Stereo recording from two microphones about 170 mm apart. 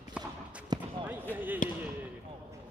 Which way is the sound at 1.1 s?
10° right (ahead or behind).